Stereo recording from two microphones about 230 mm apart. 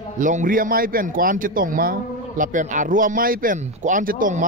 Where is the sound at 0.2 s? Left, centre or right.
Right.